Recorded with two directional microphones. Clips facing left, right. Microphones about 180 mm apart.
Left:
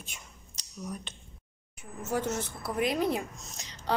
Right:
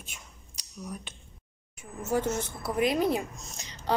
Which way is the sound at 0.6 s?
10° right (ahead or behind).